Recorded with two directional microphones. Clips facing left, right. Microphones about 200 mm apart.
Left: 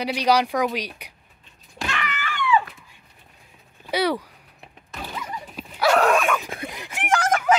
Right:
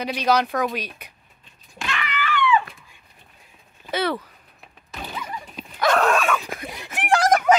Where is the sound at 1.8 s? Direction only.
40° left (ahead or behind).